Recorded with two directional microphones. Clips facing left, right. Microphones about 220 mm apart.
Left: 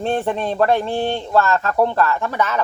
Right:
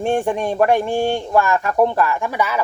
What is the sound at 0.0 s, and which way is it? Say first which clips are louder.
Speech: right 2 dB; 15° right (ahead or behind).